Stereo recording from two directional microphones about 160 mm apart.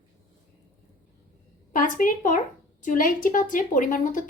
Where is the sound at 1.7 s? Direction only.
55° left (ahead or behind).